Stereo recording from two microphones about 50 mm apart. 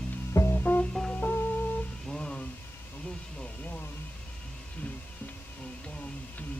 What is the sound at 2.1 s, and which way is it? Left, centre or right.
Music, left.